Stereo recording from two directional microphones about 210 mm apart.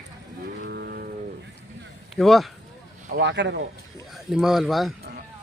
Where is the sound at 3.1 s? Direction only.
55° right (ahead or behind).